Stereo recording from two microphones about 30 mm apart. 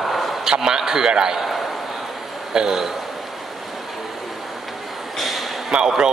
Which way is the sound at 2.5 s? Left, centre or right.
Right.